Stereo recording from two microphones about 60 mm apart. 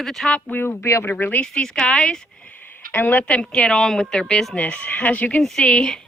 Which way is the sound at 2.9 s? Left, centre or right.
Left.